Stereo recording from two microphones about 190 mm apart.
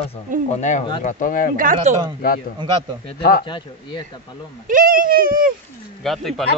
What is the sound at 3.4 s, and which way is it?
Speech, 25° left (ahead or behind).